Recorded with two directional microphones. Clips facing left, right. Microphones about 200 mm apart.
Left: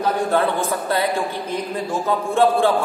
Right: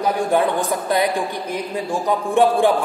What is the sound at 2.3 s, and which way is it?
Speech, 15° right (ahead or behind).